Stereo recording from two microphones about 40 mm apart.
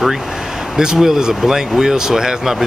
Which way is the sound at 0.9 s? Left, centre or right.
Centre.